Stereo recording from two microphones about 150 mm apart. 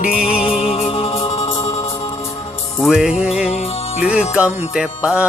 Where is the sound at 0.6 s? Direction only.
40° left (ahead or behind).